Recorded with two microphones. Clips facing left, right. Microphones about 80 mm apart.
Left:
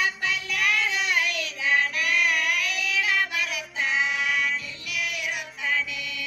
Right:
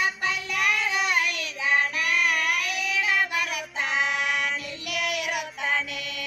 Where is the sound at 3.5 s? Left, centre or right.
Right.